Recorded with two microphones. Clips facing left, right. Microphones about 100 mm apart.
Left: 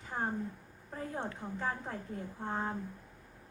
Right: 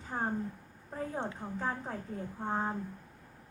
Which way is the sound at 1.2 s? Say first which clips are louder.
Right 2 dB; 20° right (ahead or behind).